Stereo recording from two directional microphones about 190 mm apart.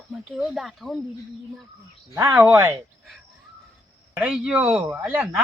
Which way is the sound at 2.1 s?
10° right (ahead or behind).